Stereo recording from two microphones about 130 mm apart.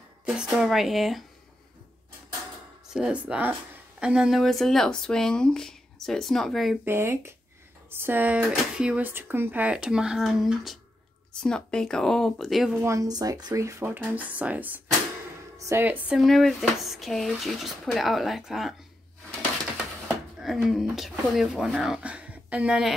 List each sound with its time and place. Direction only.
0.2 s speech: 5° right (ahead or behind)
2.9 s speech: 5° right (ahead or behind)
6.8 s speech: 20° right (ahead or behind); by 12.7 s centre (ahead or behind)
12.8 s a woman's voice: 25° right (ahead or behind)
16.1 s speech: centre (ahead or behind)
20.3 s speech: 5° right (ahead or behind)